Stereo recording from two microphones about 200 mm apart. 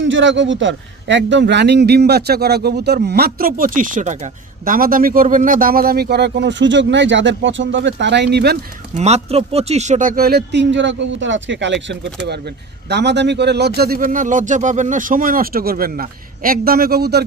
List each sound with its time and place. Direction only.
0.0 s a man's voice: 65° right (ahead or behind)
9.0 s a man's voice: 30° right (ahead or behind); by 17.2 s 55° right (ahead or behind)